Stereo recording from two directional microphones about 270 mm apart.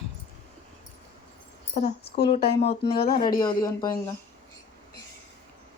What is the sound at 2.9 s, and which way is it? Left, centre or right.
Speech, left.